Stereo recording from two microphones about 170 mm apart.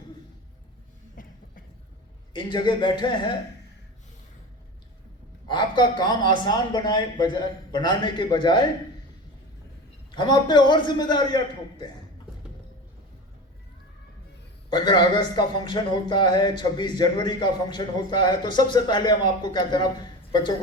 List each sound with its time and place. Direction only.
1.1 s a sound: 55° left (ahead or behind)
2.3 s a man's voice: 25° left (ahead or behind)
5.5 s a man's voice: 25° left (ahead or behind)
10.1 s a man's voice: 25° left (ahead or behind)
14.7 s a man's voice: 25° left (ahead or behind)